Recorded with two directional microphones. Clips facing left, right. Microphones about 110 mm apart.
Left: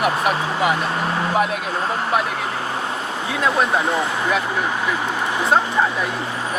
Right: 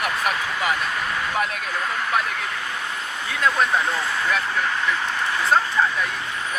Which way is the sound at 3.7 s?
25° left (ahead or behind).